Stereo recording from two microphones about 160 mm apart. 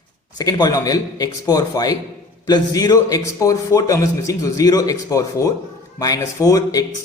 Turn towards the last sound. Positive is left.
turn(degrees=20)  # may be behind; listen again after turning